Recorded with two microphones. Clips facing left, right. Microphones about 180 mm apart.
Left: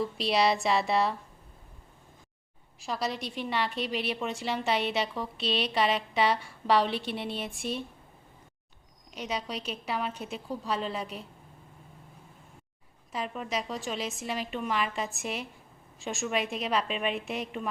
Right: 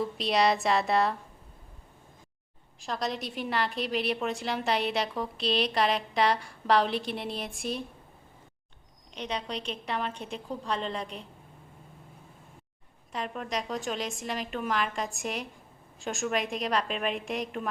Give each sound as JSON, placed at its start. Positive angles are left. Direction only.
{"t": 0.0, "sound": "a woman's voice", "side_deg": 0}
{"t": 2.8, "sound": "a woman's voice", "side_deg": 0}
{"t": 9.1, "sound": "a woman's voice", "side_deg": 5}
{"t": 13.1, "sound": "a woman's voice", "side_deg": 5}